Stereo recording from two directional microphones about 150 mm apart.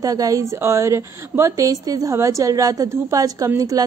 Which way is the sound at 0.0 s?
25° right (ahead or behind).